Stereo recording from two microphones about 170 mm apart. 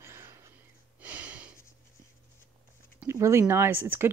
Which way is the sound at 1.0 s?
10° right (ahead or behind).